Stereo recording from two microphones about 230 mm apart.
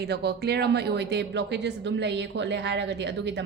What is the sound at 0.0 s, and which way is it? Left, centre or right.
Speech, right.